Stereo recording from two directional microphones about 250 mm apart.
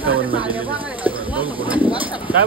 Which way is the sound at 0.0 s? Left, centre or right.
Centre.